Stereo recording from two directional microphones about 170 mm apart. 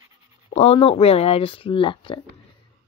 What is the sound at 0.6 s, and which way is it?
Speech, 35° left (ahead or behind).